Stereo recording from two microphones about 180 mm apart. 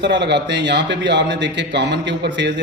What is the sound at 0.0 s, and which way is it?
A man's voice, 75° right (ahead or behind).